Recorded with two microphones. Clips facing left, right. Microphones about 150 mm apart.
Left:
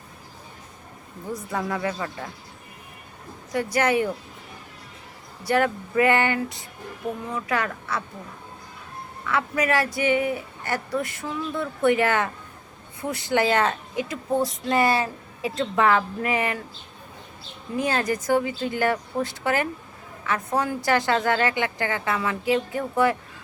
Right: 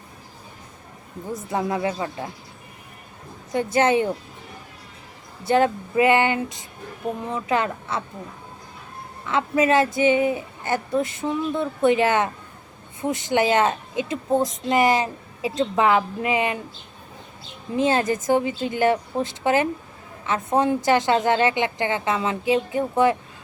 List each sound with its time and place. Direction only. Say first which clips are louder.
1.3 s a woman's voice: right 3 dB; 20° right (ahead or behind)
3.5 s a woman's voice: right 3 dB; 25° right (ahead or behind)
5.5 s a woman's voice: right 3 dB; 25° right (ahead or behind)
9.2 s a woman's voice: right 4 dB; 25° right (ahead or behind)
17.7 s a woman's voice: right 4 dB; 20° right (ahead or behind)